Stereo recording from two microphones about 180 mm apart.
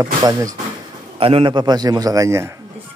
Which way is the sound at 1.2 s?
30° right (ahead or behind).